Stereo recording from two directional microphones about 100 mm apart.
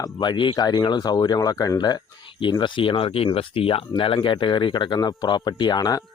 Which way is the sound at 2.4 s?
55° left (ahead or behind).